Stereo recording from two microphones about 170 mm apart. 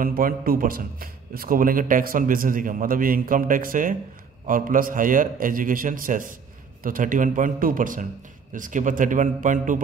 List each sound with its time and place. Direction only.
0.0 s a man's voice: 60° right (ahead or behind)